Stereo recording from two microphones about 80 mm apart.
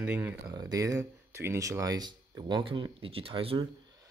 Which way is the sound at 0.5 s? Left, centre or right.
Right.